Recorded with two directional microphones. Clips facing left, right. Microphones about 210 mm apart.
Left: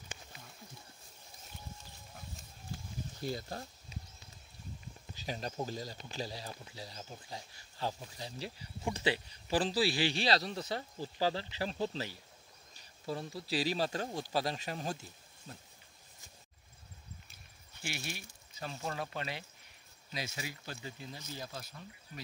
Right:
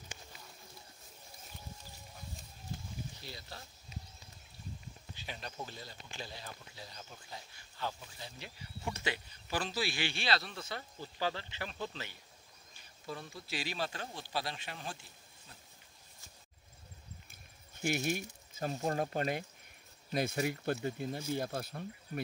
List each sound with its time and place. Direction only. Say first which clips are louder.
3.2 s speech: left 10 dB; 45° left (ahead or behind)
5.1 s speech: left 6 dB; 40° left (ahead or behind)
17.8 s speech: right 9 dB; 45° right (ahead or behind)